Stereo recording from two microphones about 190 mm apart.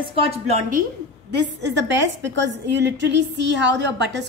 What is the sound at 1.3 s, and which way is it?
A woman's voice, 65° right (ahead or behind).